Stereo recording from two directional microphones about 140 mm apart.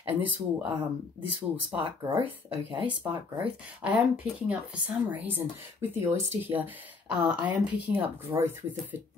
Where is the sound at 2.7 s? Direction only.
35° right (ahead or behind).